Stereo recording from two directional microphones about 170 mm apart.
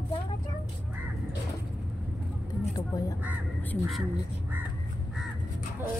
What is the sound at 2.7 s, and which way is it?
Speech, 20° left (ahead or behind).